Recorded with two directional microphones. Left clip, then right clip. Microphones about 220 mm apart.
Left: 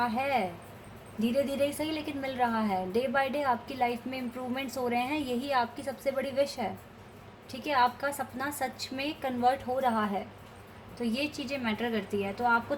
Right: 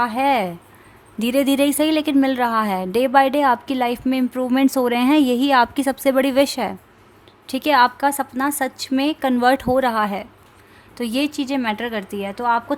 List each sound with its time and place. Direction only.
0.0 s a woman's voice: 50° right (ahead or behind)
11.3 s a woman's voice: 50° right (ahead or behind)